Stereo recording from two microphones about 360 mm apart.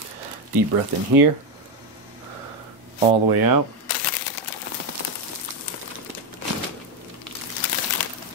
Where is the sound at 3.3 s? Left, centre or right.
Right.